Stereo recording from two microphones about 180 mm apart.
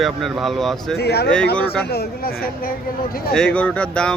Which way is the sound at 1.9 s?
55° left (ahead or behind).